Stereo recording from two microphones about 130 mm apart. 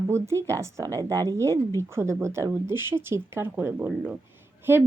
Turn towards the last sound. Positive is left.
turn(degrees=-15)  # may be behind; listen again after turning